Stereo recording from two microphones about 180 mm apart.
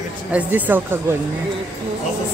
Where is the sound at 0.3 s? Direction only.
10° right (ahead or behind).